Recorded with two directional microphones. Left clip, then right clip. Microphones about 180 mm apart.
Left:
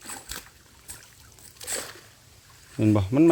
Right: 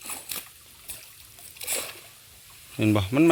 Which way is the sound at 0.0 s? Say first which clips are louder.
Right 1 dB; 10° left (ahead or behind).